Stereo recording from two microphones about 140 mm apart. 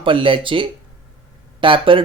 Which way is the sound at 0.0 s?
35° right (ahead or behind).